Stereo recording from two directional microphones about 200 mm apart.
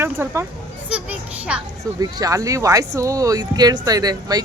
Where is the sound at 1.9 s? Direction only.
15° right (ahead or behind).